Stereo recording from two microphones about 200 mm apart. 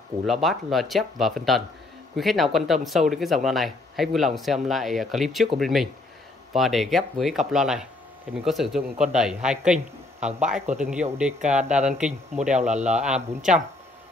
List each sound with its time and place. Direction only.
0.3 s speech: centre (ahead or behind)
12.4 s speech: 35° right (ahead or behind)
12.9 s speech: 5° right (ahead or behind)